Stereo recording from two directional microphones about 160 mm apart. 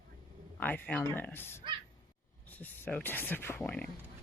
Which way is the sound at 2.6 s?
10° left (ahead or behind).